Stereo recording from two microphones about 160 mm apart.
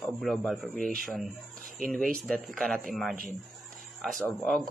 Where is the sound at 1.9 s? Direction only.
Centre (ahead or behind).